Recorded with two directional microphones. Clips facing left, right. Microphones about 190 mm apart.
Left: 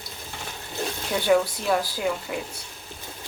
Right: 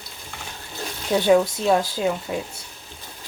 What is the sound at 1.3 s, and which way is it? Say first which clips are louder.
Speech: right 3 dB; 25° right (ahead or behind).